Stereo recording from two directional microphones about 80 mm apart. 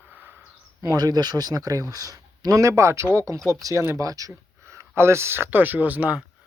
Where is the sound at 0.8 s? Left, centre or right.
Right.